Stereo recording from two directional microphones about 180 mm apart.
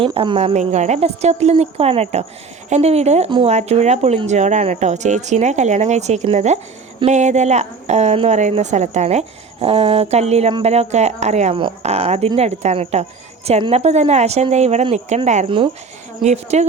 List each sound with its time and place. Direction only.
0.0 s a woman's voice: 30° right (ahead or behind)
3.2 s speech: 25° right (ahead or behind)
3.5 s a woman's voice: 40° right (ahead or behind)
15.4 s speech: 25° right (ahead or behind)
16.2 s a woman's voice: 40° right (ahead or behind)